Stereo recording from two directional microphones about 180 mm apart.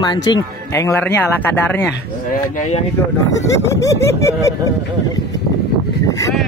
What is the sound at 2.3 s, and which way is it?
Speech, 40° left (ahead or behind).